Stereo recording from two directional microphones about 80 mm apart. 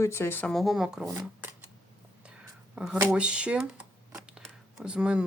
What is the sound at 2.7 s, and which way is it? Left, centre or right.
Speech, centre.